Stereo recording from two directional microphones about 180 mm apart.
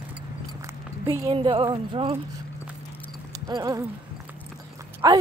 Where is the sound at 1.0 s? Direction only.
30° right (ahead or behind).